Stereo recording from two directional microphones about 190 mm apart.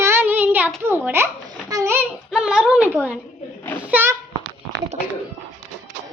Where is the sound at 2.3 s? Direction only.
5° right (ahead or behind).